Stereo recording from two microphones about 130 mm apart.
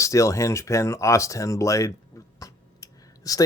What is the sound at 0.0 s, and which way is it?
Speech, 25° left (ahead or behind).